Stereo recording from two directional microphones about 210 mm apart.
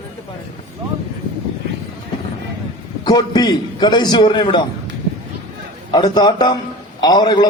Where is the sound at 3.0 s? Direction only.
20° left (ahead or behind).